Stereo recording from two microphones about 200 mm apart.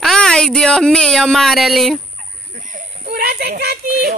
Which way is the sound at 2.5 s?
40° right (ahead or behind).